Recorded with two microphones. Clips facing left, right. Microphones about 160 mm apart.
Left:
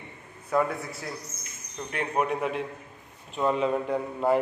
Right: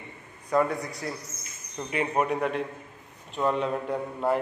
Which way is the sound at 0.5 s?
5° left (ahead or behind).